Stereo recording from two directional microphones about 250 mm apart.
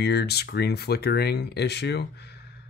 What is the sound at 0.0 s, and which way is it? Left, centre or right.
Speech, left.